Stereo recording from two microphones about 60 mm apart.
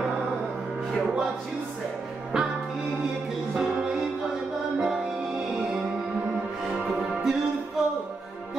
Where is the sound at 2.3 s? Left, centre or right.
Centre.